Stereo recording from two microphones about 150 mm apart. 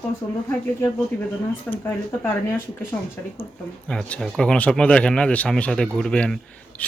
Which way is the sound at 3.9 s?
5° left (ahead or behind).